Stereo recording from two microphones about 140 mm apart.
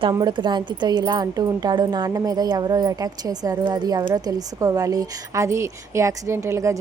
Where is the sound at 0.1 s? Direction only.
30° right (ahead or behind).